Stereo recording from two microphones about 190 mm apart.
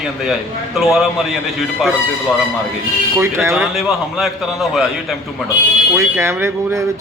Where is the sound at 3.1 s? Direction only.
15° right (ahead or behind).